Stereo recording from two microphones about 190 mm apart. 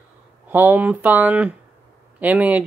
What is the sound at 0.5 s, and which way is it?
Speech, 10° right (ahead or behind).